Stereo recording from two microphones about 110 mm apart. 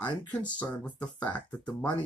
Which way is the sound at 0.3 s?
10° left (ahead or behind).